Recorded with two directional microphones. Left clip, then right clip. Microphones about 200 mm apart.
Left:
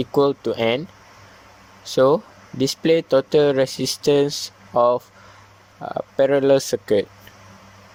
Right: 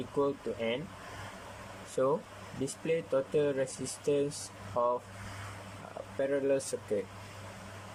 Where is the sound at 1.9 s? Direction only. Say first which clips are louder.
Left 14 dB; 45° left (ahead or behind).